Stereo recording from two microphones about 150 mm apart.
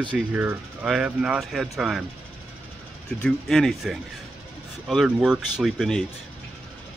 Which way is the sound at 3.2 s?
Centre (ahead or behind).